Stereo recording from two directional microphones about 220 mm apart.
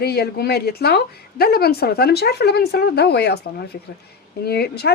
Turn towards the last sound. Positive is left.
turn(degrees=45)  # may be behind; listen again after turning